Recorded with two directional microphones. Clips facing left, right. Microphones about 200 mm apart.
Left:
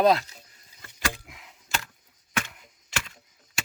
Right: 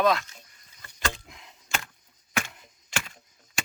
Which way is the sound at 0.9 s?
10° left (ahead or behind).